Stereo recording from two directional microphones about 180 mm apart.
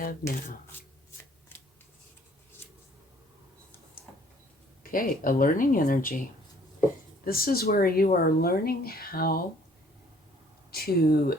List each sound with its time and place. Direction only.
0.0 s speech: 50° left (ahead or behind)
4.8 s speech: 50° left (ahead or behind)
7.3 s speech: 55° left (ahead or behind)
10.7 s speech: 60° left (ahead or behind)